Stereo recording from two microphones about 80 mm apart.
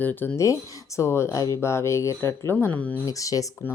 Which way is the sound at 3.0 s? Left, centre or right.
Left.